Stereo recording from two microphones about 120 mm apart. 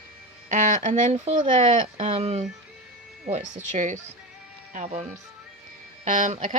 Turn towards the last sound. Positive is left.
turn(degrees=-90)